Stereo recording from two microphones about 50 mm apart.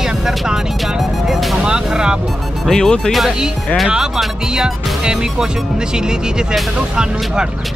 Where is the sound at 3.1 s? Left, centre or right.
Centre.